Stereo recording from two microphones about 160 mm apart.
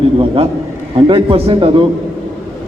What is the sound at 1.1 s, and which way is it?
Speech, 35° right (ahead or behind).